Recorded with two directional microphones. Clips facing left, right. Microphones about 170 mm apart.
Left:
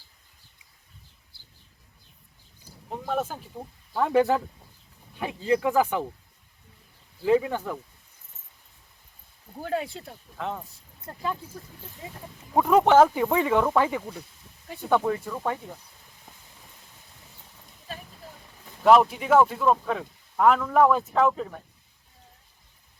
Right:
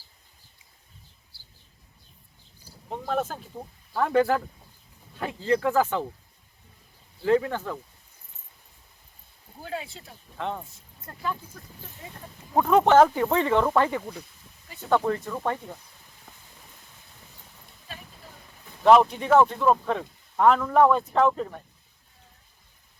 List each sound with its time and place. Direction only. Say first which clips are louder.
2.9 s speech: right 1 dB; 5° left (ahead or behind)
7.3 s speech: even; 10° left (ahead or behind)
9.6 s speech: left 6 dB; 50° left (ahead or behind)
10.3 s speech: right 1 dB; centre (ahead or behind)
11.0 s speech: left 1 dB; 25° left (ahead or behind)
12.5 s speech: even; 10° left (ahead or behind)
18.9 s speech: right 1 dB; 5° left (ahead or behind)